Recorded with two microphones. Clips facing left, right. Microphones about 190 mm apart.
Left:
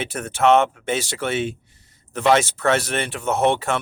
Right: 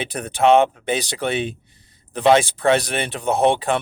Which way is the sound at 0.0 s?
15° right (ahead or behind).